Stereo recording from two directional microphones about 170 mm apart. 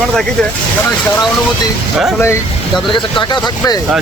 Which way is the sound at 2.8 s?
30° left (ahead or behind).